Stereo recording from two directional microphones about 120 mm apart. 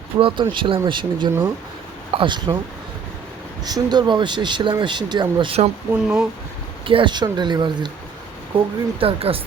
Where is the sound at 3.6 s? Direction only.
35° right (ahead or behind).